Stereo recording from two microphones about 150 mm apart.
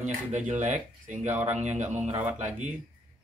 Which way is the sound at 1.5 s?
50° right (ahead or behind).